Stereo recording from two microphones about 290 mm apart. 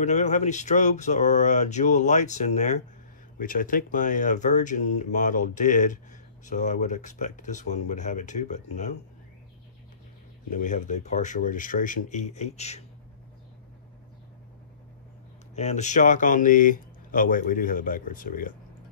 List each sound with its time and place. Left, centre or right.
0.0 s speech: left
10.5 s speech: left
15.5 s speech: left